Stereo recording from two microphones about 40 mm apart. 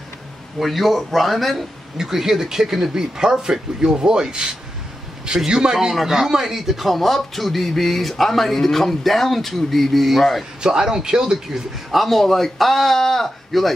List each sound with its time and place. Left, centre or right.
0.6 s a man's voice: centre
2.0 s a man's voice: centre
10.6 s speech: centre
11.9 s a man's voice: centre